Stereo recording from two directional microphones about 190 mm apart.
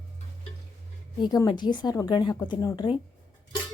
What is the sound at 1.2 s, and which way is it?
A woman's voice, 20° left (ahead or behind).